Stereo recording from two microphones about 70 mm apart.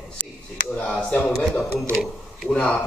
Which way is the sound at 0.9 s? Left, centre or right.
Centre.